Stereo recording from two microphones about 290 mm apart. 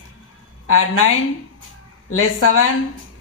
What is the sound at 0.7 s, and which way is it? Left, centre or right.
A woman's voice, left.